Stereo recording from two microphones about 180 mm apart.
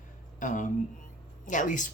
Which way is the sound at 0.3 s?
45° left (ahead or behind).